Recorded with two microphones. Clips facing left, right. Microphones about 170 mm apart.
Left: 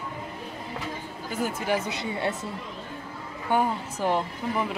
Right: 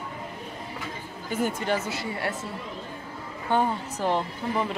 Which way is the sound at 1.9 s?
20° left (ahead or behind).